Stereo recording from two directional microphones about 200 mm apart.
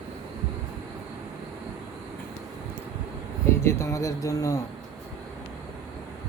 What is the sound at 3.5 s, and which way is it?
Speech, 10° left (ahead or behind).